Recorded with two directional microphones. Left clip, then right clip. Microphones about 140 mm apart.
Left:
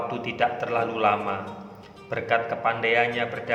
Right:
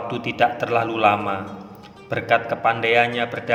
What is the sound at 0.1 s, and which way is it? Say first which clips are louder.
A man's voice: right 9 dB; 25° right (ahead or behind).